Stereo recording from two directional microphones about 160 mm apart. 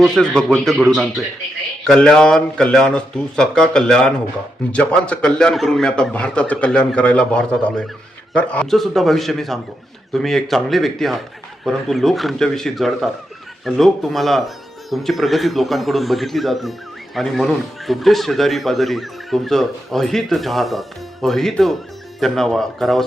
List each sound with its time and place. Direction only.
0.0 s a man's voice: 5° left (ahead or behind)